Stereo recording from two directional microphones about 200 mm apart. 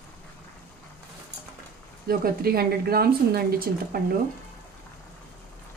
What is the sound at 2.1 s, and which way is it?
Speech, 50° right (ahead or behind).